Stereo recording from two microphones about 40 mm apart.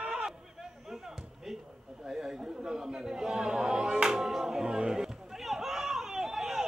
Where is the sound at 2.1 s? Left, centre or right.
Centre.